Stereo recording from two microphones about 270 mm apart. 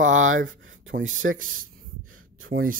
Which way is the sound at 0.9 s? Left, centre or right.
Right.